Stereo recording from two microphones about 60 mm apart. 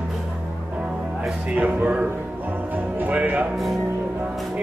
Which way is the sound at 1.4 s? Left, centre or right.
Right.